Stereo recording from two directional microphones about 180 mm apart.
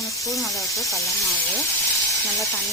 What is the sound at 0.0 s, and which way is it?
Snake, 20° left (ahead or behind).